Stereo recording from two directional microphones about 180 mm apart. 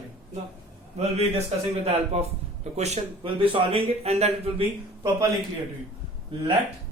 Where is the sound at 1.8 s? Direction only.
35° right (ahead or behind).